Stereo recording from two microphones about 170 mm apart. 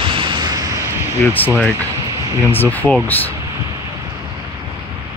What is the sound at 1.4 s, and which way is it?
Speech, 10° left (ahead or behind).